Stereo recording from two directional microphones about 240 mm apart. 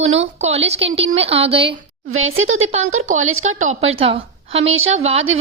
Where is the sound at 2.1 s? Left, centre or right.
Right.